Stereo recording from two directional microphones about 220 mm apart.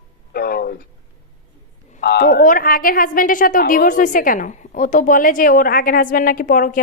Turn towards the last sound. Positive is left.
turn(degrees=40)  # may be behind; listen again after turning